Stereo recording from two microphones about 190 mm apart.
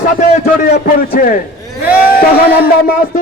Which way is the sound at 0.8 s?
50° left (ahead or behind).